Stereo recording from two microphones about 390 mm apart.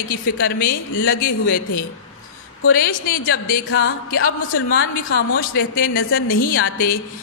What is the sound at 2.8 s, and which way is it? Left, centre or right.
A man's voice, left.